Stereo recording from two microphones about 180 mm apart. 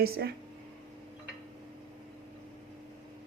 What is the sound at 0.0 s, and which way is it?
Speech, 65° right (ahead or behind).